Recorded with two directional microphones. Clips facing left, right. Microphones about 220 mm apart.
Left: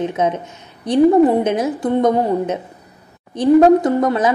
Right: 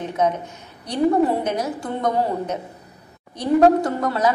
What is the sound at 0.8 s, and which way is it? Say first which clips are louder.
A woman's voice: left 7 dB; 20° left (ahead or behind).